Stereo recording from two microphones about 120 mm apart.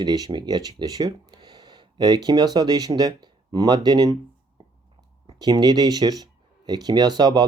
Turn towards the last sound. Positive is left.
turn(degrees=-35)  # may be behind; listen again after turning